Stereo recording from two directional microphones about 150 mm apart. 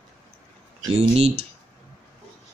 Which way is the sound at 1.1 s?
40° right (ahead or behind).